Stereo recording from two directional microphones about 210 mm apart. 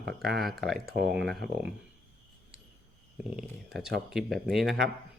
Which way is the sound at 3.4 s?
Centre (ahead or behind).